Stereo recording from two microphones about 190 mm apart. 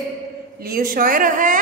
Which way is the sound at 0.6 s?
50° right (ahead or behind).